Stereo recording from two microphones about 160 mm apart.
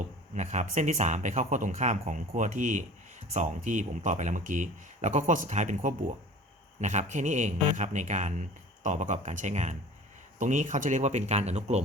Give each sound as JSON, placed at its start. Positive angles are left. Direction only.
{"t": 0.3, "sound": "speech", "side_deg": -50}